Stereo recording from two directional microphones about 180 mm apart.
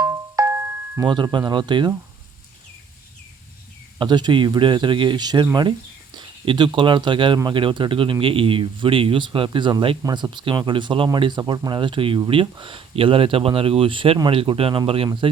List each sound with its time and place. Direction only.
0.0 s marimba: 15° right (ahead or behind)
1.0 s speech: 25° right (ahead or behind)
3.9 s speech: 25° right (ahead or behind)